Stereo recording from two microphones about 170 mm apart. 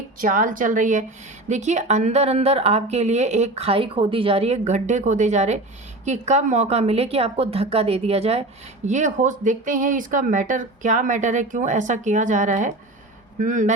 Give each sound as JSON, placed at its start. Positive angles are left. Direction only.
{"t": 0.2, "sound": "a woman's voice", "side_deg": -50}